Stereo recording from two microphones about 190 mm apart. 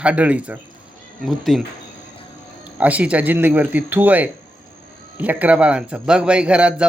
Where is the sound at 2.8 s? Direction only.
5° right (ahead or behind).